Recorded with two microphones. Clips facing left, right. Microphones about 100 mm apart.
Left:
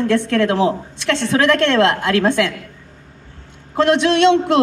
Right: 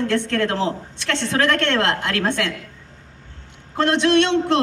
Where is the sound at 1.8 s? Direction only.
20° left (ahead or behind).